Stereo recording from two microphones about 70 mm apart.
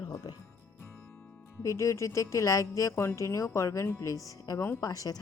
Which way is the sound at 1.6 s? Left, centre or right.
Left.